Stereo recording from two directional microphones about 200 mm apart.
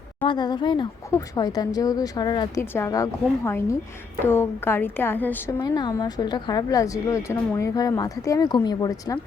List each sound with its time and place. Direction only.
0.3 s a woman's voice: 20° left (ahead or behind)